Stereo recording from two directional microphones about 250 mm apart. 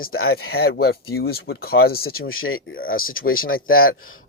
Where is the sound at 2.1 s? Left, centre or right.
Left.